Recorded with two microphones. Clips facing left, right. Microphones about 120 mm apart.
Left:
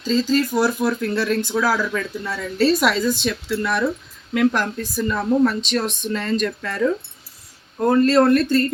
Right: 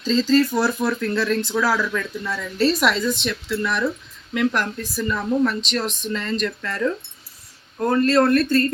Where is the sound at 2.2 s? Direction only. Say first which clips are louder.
Left 1 dB; 25° left (ahead or behind).